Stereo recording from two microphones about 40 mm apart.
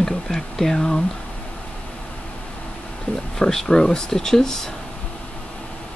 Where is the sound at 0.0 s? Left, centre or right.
Centre.